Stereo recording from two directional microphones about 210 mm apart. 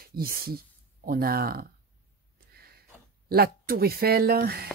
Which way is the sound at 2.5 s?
45° right (ahead or behind).